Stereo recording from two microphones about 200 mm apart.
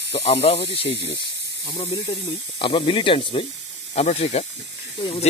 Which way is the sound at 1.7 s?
25° left (ahead or behind).